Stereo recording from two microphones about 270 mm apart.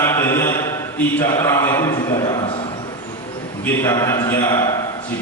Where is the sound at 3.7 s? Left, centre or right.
Centre.